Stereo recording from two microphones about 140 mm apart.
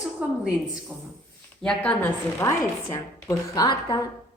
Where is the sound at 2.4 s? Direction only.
20° left (ahead or behind).